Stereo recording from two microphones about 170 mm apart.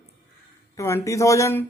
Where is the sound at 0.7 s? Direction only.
20° left (ahead or behind).